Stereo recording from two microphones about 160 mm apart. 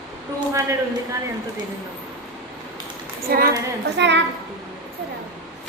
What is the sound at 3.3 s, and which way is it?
Speech, 70° right (ahead or behind).